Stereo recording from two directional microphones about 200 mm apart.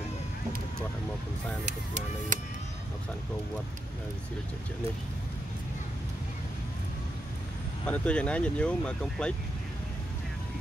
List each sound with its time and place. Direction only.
2.0 s speech: 40° right (ahead or behind)
7.8 s speech: 5° left (ahead or behind)